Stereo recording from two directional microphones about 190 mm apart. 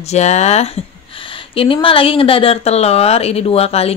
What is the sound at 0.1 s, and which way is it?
Speech, 35° left (ahead or behind).